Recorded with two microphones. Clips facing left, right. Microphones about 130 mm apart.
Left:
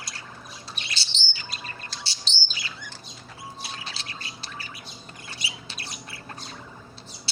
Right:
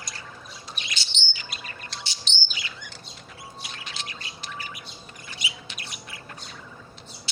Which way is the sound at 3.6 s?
35° left (ahead or behind).